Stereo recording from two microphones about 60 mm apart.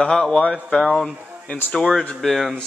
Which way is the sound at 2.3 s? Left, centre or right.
Centre.